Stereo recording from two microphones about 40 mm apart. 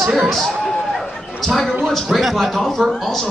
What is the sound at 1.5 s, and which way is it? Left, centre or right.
A man's voice, centre.